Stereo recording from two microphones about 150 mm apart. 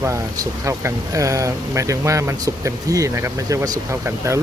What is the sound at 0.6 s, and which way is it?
Speech, 20° right (ahead or behind).